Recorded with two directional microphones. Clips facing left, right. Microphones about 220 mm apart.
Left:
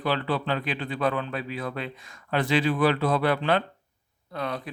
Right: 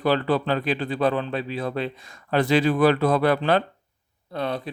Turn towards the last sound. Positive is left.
turn(degrees=-30)  # may be behind; listen again after turning